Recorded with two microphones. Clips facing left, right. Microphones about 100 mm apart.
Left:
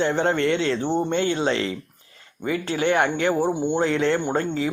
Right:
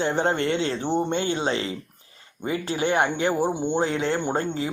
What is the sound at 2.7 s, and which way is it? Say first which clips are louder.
Speech: left 2 dB; 30° right (ahead or behind).